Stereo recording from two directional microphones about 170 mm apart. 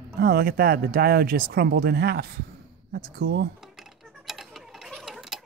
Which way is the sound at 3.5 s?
Centre (ahead or behind).